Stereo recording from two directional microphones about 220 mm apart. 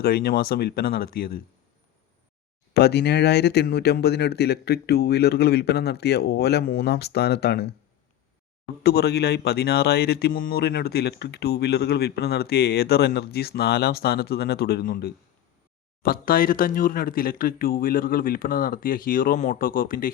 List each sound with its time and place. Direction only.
0.0 s speech: 45° left (ahead or behind)
2.7 s speech: 50° left (ahead or behind)
8.8 s speech: 45° left (ahead or behind)